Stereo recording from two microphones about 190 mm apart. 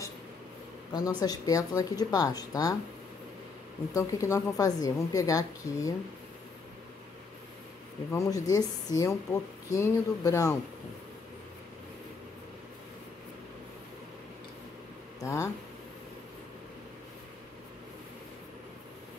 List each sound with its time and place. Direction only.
0.9 s speech: 20° left (ahead or behind)
3.9 s a woman's voice: 15° left (ahead or behind)
8.1 s a woman's voice: 15° left (ahead or behind)
15.1 s speech: 15° left (ahead or behind)